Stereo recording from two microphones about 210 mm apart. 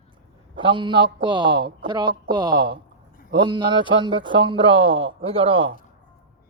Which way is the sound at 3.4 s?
20° right (ahead or behind).